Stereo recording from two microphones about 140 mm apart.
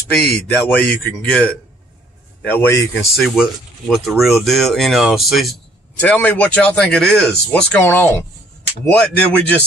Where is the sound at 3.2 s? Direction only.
Centre (ahead or behind).